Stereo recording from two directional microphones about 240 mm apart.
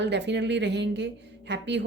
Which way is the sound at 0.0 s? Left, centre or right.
Right.